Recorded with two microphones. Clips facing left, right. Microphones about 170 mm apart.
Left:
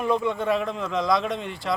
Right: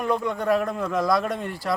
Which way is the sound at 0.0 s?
Centre (ahead or behind).